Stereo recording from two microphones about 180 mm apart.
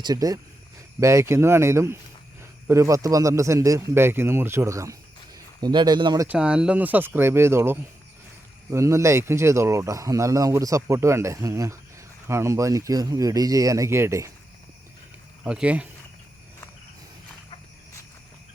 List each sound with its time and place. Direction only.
0.0 s a man's voice: 20° right (ahead or behind)
6.2 s speech: 5° right (ahead or behind)
15.4 s speech: 5° right (ahead or behind)